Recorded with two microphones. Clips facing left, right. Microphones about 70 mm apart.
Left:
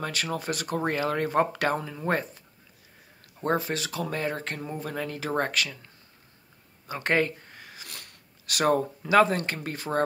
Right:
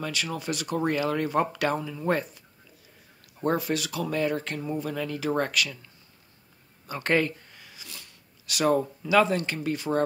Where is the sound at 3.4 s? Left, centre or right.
Left.